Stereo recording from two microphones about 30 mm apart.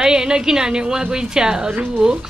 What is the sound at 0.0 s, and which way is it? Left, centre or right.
A woman's voice, right.